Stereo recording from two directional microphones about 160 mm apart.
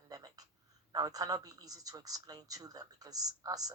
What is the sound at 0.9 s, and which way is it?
A woman's voice, 20° right (ahead or behind).